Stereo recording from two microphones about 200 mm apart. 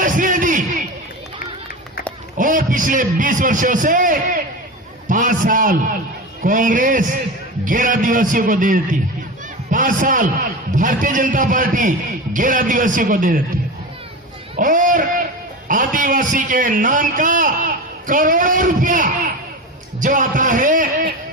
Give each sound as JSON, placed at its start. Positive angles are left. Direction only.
{"t": 0.0, "sound": "music", "side_deg": -40}
{"t": 2.4, "sound": "a man's voice", "side_deg": -40}
{"t": 14.5, "sound": "a man's voice", "side_deg": -40}